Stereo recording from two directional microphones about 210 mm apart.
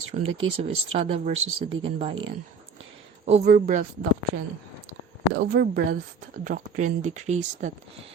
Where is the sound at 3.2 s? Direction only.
35° right (ahead or behind).